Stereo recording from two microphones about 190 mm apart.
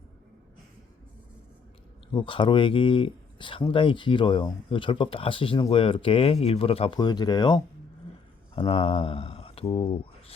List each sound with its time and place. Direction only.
2.1 s speech: 25° left (ahead or behind)